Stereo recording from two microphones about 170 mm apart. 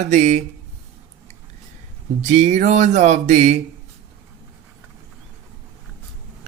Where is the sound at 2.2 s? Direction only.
40° right (ahead or behind).